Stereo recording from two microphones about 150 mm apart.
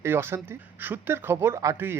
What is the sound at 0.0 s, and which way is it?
Speech, 15° right (ahead or behind).